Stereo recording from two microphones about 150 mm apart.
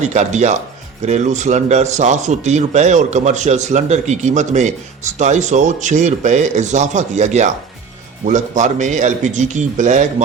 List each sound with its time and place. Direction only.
0.0 s speech: 50° right (ahead or behind)